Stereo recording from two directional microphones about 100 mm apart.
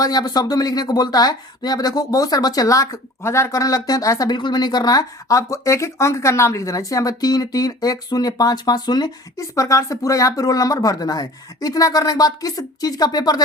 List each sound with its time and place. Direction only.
0.0 s speech: 40° left (ahead or behind)
4.4 s speech: 45° left (ahead or behind)